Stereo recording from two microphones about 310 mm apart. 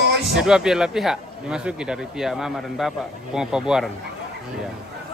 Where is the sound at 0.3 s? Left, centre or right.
Centre.